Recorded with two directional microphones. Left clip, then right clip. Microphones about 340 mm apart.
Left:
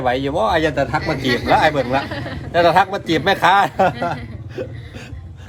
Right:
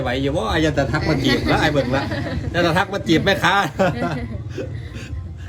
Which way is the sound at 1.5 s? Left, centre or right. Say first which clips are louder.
Left 3 dB; centre.